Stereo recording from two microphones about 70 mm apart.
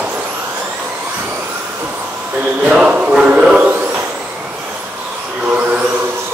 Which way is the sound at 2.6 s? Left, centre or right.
Centre.